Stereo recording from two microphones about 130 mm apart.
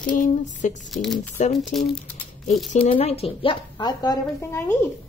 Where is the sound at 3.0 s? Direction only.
50° left (ahead or behind).